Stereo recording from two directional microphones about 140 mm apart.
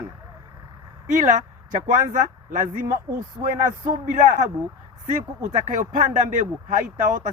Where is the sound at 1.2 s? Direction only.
65° right (ahead or behind).